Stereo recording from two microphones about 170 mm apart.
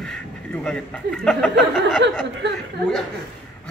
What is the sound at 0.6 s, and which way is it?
A man's voice, 5° left (ahead or behind).